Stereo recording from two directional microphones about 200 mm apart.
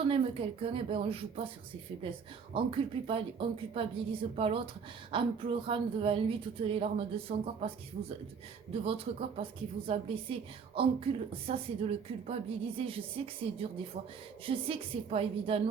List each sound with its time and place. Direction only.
0.6 s speech: 25° right (ahead or behind)
2.5 s speech: 25° right (ahead or behind)